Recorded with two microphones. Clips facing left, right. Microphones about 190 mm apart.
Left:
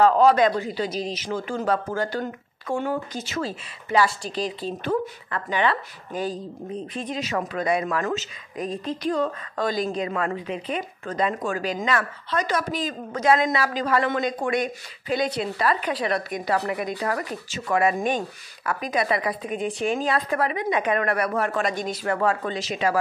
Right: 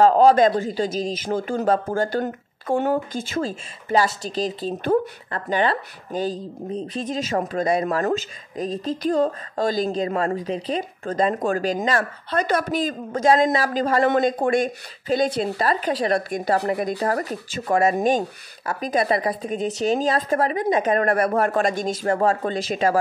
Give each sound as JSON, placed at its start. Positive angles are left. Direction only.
{"t": 0.0, "sound": "a woman's voice", "side_deg": -35}
{"t": 0.7, "sound": "a woman's voice", "side_deg": -45}
{"t": 22.6, "sound": "speech", "side_deg": -50}